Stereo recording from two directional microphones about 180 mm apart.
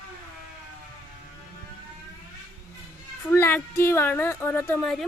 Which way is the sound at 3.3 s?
10° left (ahead or behind).